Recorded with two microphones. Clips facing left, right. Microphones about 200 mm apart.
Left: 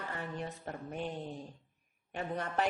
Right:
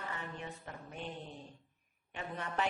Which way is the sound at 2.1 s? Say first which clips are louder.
Left 4 dB; 40° left (ahead or behind).